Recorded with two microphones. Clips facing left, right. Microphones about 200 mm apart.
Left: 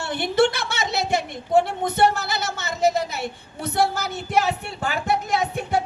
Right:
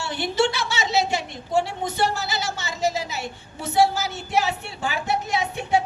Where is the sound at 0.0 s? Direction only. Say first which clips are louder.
Left 3 dB; 55° left (ahead or behind).